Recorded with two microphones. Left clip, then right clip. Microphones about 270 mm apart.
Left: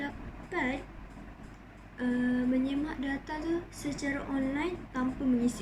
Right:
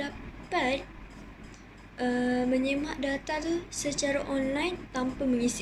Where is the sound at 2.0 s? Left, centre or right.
Right.